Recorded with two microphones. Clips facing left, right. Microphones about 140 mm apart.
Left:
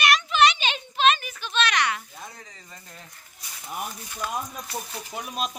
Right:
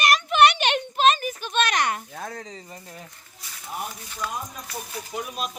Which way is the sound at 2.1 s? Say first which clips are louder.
Right 8 dB; 55° right (ahead or behind).